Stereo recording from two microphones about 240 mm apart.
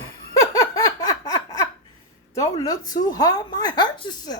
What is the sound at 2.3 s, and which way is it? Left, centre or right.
A woman's voice, centre.